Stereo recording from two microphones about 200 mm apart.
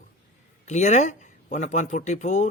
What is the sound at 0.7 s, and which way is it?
Speech, 35° left (ahead or behind).